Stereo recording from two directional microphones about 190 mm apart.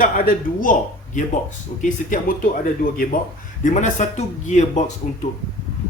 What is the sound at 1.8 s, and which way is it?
A man's voice, 45° left (ahead or behind).